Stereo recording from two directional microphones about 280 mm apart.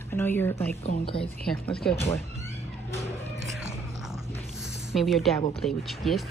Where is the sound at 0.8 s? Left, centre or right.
Centre.